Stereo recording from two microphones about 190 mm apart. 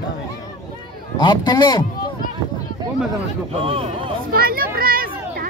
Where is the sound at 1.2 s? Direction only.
20° left (ahead or behind).